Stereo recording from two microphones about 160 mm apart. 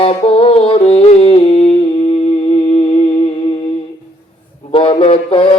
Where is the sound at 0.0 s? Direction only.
35° left (ahead or behind).